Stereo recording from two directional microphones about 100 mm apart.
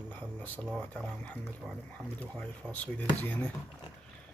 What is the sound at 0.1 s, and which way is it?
Speech, 15° left (ahead or behind).